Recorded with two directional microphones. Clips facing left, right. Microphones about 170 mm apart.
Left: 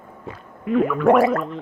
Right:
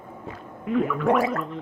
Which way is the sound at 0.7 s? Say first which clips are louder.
Left 6 dB; 60° left (ahead or behind).